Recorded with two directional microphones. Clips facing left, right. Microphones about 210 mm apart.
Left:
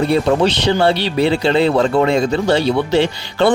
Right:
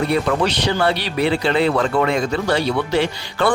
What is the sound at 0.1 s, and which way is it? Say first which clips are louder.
Speech: left 4 dB; 25° left (ahead or behind).